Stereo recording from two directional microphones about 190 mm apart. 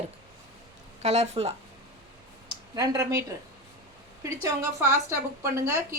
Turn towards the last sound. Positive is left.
turn(degrees=-15)  # may be behind; listen again after turning